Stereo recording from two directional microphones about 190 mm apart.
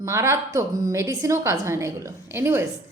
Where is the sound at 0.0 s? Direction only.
15° right (ahead or behind).